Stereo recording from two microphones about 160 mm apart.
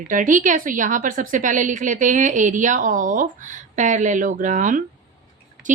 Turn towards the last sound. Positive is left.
turn(degrees=-50)  # may be behind; listen again after turning